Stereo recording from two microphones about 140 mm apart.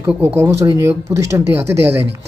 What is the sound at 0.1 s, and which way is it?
Speech, 10° right (ahead or behind).